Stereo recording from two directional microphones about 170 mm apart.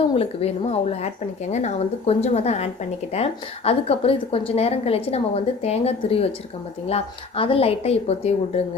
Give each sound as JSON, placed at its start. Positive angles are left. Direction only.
{"t": 0.2, "sound": "a woman's voice", "side_deg": 35}